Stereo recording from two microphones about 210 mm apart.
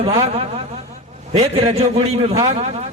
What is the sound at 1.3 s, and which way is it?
Speech, 30° right (ahead or behind).